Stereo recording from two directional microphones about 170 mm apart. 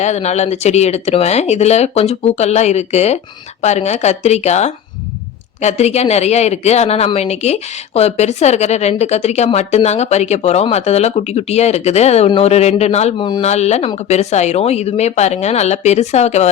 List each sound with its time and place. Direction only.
0.0 s speech: 40° left (ahead or behind)
13.1 s speech: 25° left (ahead or behind)
13.4 s speech: 40° left (ahead or behind)